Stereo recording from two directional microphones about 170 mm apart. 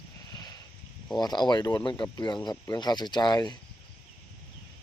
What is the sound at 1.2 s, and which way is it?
Speech, 25° left (ahead or behind).